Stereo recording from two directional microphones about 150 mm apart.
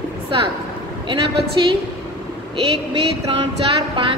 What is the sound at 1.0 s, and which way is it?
Speech, 35° right (ahead or behind).